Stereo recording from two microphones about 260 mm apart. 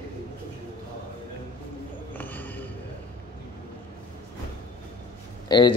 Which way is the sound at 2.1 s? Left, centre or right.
Centre.